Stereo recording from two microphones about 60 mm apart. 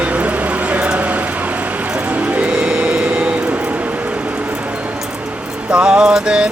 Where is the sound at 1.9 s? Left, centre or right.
Right.